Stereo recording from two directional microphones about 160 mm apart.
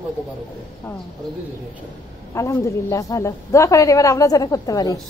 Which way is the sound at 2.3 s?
20° left (ahead or behind).